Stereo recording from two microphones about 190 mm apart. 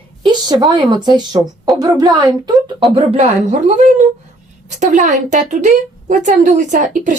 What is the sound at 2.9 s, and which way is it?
A woman's voice, 35° right (ahead or behind).